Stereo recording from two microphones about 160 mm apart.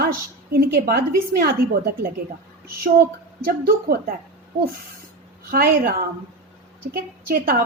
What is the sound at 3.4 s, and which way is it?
Speech, 65° right (ahead or behind).